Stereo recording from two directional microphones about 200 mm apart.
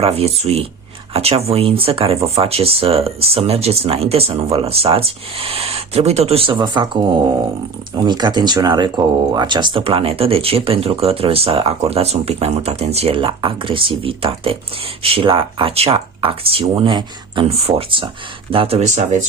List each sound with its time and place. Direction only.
0.0 s speech: 30° right (ahead or behind)